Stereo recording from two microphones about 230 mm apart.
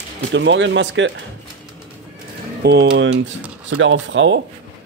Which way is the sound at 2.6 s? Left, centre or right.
Right.